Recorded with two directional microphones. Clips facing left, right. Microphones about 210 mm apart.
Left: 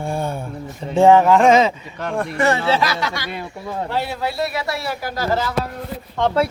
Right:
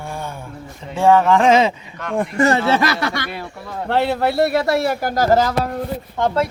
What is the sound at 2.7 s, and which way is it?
A man's voice, 55° right (ahead or behind).